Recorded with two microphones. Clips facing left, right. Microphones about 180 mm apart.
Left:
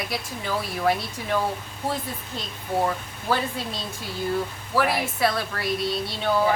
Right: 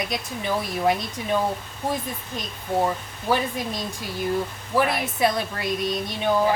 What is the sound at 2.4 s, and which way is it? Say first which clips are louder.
Speech: right 1 dB; 15° right (ahead or behind).